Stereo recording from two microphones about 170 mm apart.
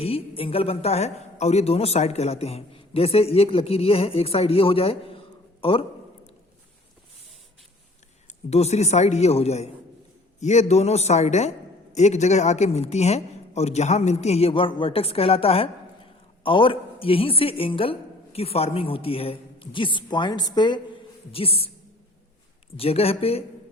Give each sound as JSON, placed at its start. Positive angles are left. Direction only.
{"t": 0.0, "sound": "a man's voice", "side_deg": 35}
{"t": 8.3, "sound": "a man's voice", "side_deg": 40}
{"t": 22.8, "sound": "a man's voice", "side_deg": 35}